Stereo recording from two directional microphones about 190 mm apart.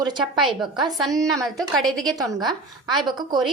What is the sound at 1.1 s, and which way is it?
Speech, 15° right (ahead or behind).